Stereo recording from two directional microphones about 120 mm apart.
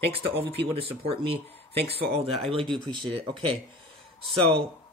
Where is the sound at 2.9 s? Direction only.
45° right (ahead or behind).